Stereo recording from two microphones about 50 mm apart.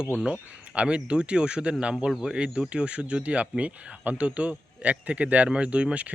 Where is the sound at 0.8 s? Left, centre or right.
Right.